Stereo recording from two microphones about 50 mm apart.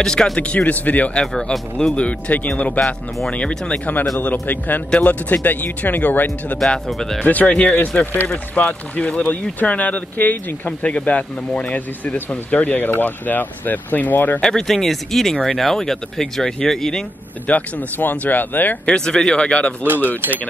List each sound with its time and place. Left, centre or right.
0.0 s speech: centre
0.4 s speech: left
1.1 s speech: centre
2.0 s speech: left
4.2 s speech: left
7.0 s speech: centre
7.2 s speech: left
8.0 s speech: left
8.5 s speech: left
14.4 s speech: centre
17.5 s speech: left
18.9 s speech: centre
19.8 s speech: right